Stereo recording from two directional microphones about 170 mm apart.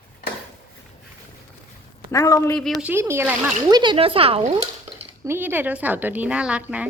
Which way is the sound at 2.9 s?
15° right (ahead or behind).